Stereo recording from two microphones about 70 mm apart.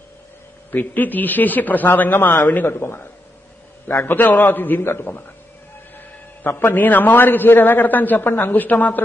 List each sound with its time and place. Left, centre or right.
0.7 s a man's voice: left
6.4 s a man's voice: left